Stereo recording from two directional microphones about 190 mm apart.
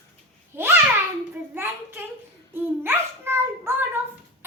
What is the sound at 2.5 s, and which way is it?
Child singing, 10° right (ahead or behind).